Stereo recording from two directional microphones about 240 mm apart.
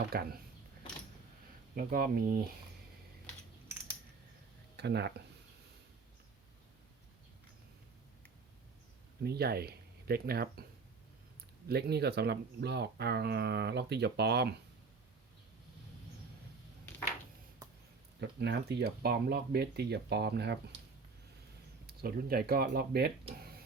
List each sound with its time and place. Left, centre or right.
0.1 s speech: right
1.7 s speech: right
4.8 s speech: right
9.2 s speech: right
11.7 s speech: right
18.2 s speech: right
21.8 s speech: right